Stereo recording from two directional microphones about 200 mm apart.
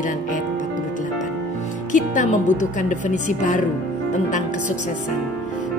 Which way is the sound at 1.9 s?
40° left (ahead or behind).